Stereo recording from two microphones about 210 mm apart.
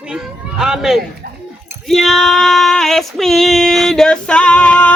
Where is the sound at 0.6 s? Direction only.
Centre (ahead or behind).